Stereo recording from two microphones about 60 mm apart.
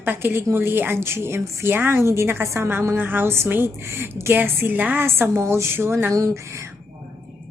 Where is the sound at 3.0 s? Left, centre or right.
Right.